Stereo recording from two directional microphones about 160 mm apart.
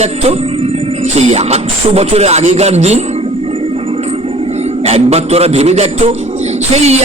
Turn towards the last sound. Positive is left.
turn(degrees=-40)  # may be behind; listen again after turning